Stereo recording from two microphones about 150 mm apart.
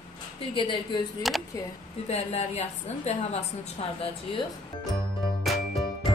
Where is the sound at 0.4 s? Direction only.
35° left (ahead or behind).